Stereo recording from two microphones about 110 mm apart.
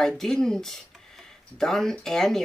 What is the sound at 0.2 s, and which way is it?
Speech, 5° left (ahead or behind).